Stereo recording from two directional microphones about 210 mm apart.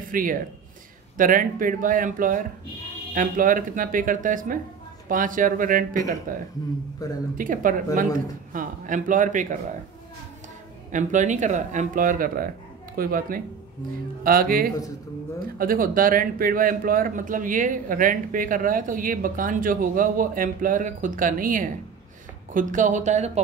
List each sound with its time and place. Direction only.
0.1 s speech: 40° right (ahead or behind)
7.0 s speech: 15° left (ahead or behind)
7.3 s speech: 40° right (ahead or behind)
10.9 s speech: 35° right (ahead or behind)